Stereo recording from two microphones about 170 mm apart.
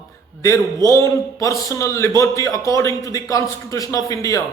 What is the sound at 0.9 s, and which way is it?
A man's voice, 15° left (ahead or behind).